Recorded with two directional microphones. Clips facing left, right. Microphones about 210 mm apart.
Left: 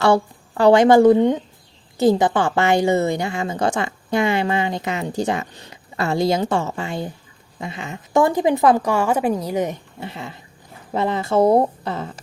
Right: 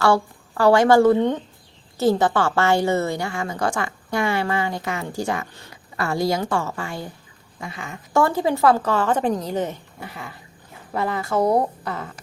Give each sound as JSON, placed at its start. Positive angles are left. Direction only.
{"t": 0.0, "sound": "a woman's voice", "side_deg": 20}
{"t": 10.0, "sound": "a woman's voice", "side_deg": 25}